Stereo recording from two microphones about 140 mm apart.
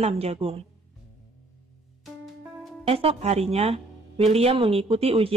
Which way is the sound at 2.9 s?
45° right (ahead or behind).